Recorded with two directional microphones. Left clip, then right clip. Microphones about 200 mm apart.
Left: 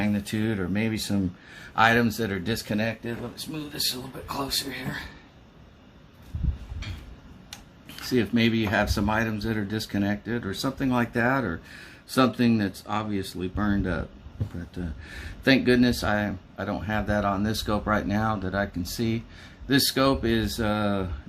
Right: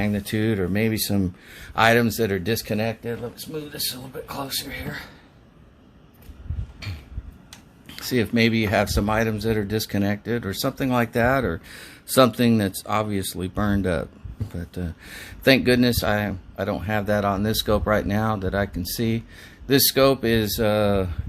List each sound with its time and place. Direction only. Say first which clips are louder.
0.0 s speech: right 4 dB; 40° right (ahead or behind)
7.9 s speech: right 3 dB; 45° right (ahead or behind)